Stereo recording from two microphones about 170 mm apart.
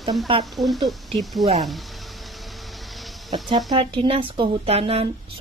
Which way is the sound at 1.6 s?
Centre (ahead or behind).